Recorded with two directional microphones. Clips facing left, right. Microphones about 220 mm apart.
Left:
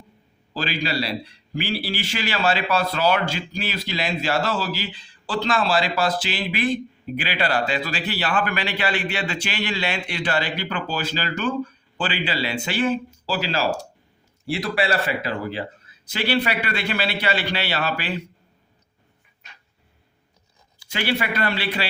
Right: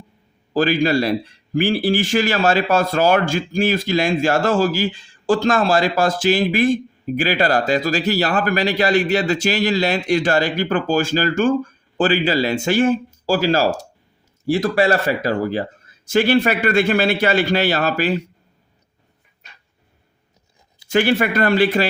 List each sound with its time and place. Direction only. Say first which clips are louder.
0.5 s a man's voice: right 10 dB; 50° right (ahead or behind)
20.9 s a man's voice: right 8 dB; 50° right (ahead or behind)